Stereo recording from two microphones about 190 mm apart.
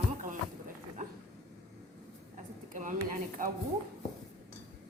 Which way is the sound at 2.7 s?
45° right (ahead or behind).